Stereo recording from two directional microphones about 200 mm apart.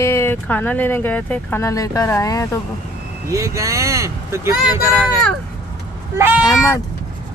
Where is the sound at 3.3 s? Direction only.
15° right (ahead or behind).